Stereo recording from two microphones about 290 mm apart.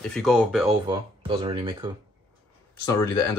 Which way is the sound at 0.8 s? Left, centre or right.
Centre.